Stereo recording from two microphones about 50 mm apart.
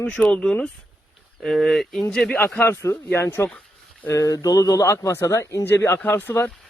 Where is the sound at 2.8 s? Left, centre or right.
Left.